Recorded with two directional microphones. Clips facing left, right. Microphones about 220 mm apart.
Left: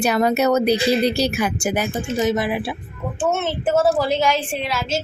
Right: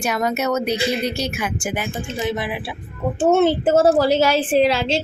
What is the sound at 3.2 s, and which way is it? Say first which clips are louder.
A woman's voice: right 6 dB; 35° right (ahead or behind).